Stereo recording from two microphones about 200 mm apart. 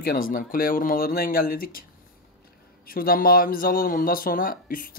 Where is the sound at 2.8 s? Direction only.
45° left (ahead or behind).